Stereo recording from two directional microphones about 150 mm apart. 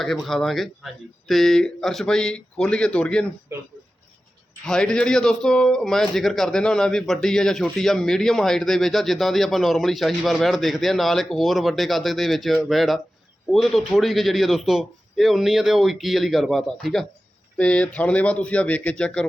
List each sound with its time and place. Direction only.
0.0 s speech: centre (ahead or behind)
4.6 s speech: 5° left (ahead or behind)